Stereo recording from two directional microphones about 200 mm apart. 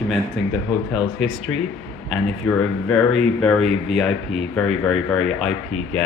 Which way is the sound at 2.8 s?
Centre (ahead or behind).